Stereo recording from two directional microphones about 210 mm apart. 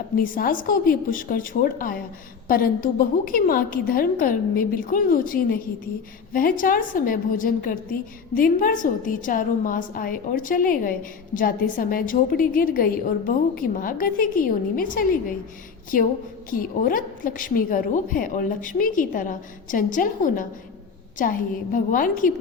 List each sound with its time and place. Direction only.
0.2 s a woman's voice: 40° left (ahead or behind)
16.5 s a woman's voice: 40° left (ahead or behind)